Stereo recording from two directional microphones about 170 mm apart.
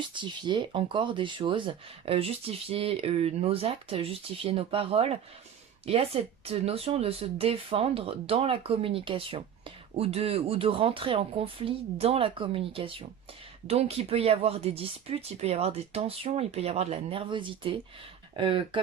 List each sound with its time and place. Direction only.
0.1 s speech: 25° right (ahead or behind)